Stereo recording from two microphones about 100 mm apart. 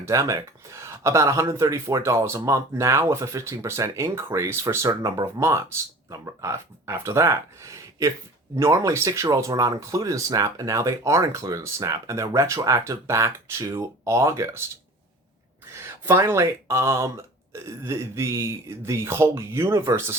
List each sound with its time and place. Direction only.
0.0 s speech: 30° right (ahead or behind)
15.7 s speech: 25° right (ahead or behind)